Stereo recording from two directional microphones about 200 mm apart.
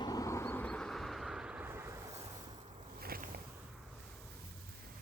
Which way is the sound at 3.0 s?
50° right (ahead or behind).